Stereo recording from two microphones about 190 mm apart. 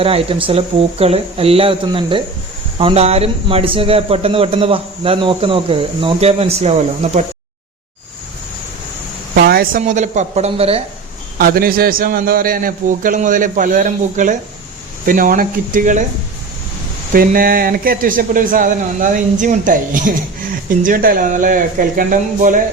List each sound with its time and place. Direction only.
0.0 s a man's voice: 30° right (ahead or behind)
9.3 s a woman's voice: 55° right (ahead or behind); by 10.8 s 30° right (ahead or behind)
11.3 s speech: 50° right (ahead or behind)
17.1 s speech: 50° right (ahead or behind)